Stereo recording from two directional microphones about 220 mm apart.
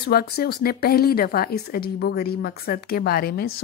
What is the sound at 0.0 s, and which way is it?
Speech, 45° left (ahead or behind).